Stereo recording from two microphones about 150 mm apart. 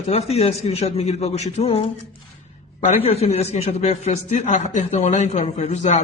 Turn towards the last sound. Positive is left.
turn(degrees=50)  # may be behind; listen again after turning